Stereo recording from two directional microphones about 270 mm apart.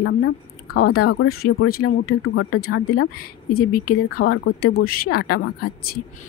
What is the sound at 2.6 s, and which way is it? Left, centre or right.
A woman's voice, left.